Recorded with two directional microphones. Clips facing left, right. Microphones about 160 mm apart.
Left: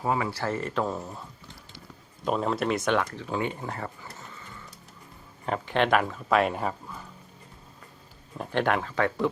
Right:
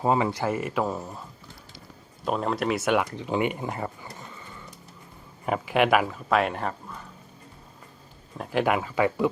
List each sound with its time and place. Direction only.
0.0 s speech: 25° right (ahead or behind); by 1.2 s centre (ahead or behind)
2.2 s speech: centre (ahead or behind)
3.0 s speech: 15° right (ahead or behind); by 6.7 s 5° left (ahead or behind)
8.4 s speech: 5° right (ahead or behind)